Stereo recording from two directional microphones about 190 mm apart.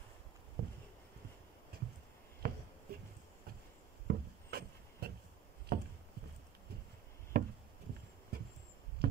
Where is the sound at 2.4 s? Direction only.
50° right (ahead or behind).